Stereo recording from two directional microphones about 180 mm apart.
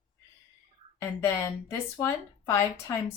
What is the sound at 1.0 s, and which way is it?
A woman's voice, 15° left (ahead or behind).